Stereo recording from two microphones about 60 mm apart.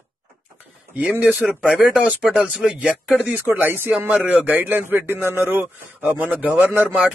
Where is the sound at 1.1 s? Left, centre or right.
Right.